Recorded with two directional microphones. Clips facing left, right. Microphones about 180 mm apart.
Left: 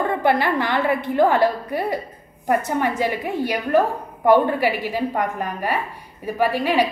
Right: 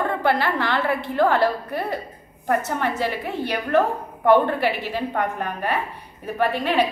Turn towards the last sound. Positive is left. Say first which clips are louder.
# left 2 dB
turn(degrees=10)  # may be behind; listen again after turning